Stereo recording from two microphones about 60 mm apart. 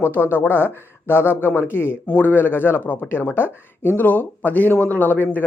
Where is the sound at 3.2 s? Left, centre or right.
Left.